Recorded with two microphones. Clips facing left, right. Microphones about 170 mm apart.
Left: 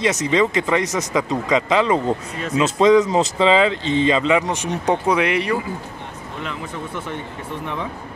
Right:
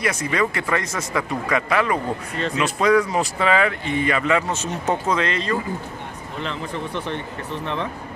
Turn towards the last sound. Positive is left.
turn(degrees=5)  # may be behind; listen again after turning